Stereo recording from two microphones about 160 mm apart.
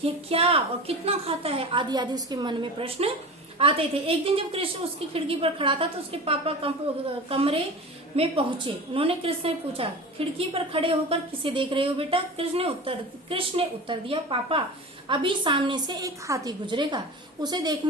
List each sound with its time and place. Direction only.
0.0 s a woman's voice: 35° right (ahead or behind)